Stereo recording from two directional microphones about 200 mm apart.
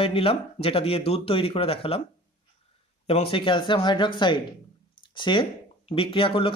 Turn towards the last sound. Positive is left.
turn(degrees=25)  # may be behind; listen again after turning